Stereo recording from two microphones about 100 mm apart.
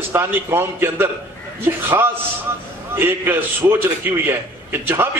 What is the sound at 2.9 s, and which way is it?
A man's voice, 20° right (ahead or behind).